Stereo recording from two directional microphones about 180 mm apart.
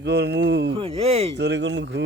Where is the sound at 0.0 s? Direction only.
70° right (ahead or behind).